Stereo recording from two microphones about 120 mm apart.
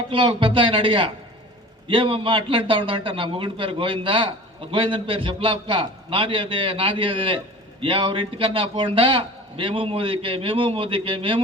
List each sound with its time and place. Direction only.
0.1 s a man's voice: 45° right (ahead or behind)